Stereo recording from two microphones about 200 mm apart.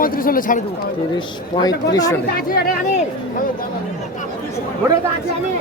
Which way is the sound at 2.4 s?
50° left (ahead or behind).